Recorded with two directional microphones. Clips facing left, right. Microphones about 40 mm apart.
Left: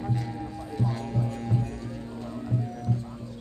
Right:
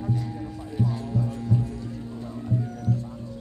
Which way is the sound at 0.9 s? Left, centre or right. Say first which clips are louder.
Right 2 dB; left.